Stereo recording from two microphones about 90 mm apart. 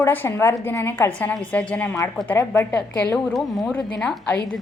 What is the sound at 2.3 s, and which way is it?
Speech, 30° left (ahead or behind).